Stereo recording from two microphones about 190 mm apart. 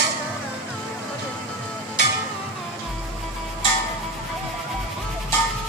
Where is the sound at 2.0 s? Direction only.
65° left (ahead or behind).